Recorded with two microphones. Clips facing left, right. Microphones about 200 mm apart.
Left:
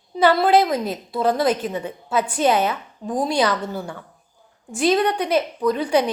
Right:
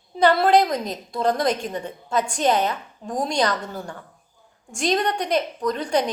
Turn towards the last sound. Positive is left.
turn(degrees=10)  # may be behind; listen again after turning